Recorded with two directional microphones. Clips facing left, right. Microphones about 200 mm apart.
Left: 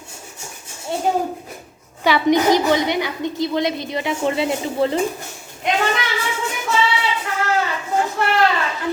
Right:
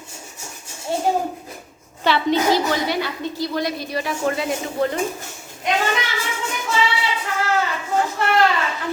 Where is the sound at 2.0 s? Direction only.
15° left (ahead or behind).